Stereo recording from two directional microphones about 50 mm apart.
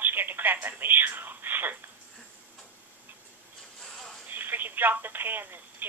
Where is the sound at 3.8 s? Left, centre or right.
Centre.